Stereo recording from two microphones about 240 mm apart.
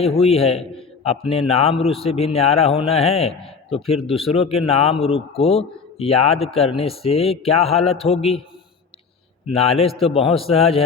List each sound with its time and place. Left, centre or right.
0.0 s a man's voice: left
9.5 s a man's voice: left